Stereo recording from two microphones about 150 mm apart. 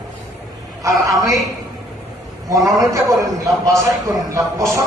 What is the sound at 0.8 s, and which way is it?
Speech, 20° right (ahead or behind).